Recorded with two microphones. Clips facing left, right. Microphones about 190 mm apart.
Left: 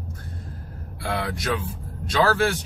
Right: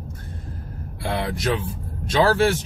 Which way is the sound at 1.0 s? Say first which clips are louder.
Right 2 dB; 25° right (ahead or behind).